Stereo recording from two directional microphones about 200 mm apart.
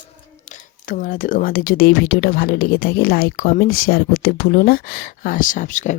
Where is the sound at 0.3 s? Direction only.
40° left (ahead or behind).